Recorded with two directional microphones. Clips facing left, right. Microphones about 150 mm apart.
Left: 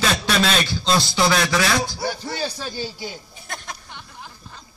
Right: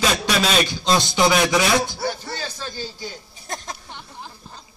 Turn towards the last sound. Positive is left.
turn(degrees=-30)  # may be behind; listen again after turning